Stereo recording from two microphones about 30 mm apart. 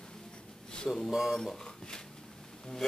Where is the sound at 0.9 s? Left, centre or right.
Centre.